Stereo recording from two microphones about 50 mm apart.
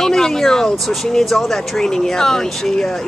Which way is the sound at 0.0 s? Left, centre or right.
Centre.